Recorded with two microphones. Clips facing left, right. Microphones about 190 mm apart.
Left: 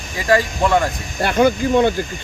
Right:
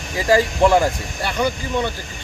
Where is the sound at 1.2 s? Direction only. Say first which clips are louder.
Left 7 dB; 55° left (ahead or behind).